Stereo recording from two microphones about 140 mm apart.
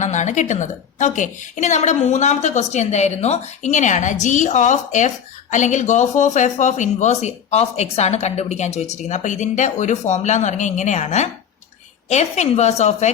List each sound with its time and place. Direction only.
0.0 s a woman's voice: 60° left (ahead or behind)